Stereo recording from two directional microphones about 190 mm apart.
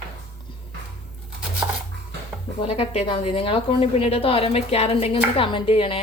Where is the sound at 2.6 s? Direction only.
30° left (ahead or behind).